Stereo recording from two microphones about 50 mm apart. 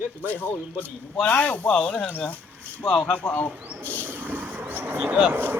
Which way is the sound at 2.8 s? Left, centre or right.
Centre.